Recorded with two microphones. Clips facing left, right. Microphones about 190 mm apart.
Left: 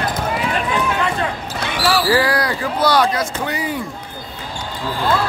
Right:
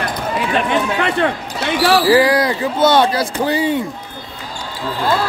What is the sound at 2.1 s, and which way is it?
Speech, 20° right (ahead or behind).